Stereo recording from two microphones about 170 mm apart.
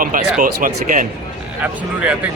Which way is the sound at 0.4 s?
55° right (ahead or behind).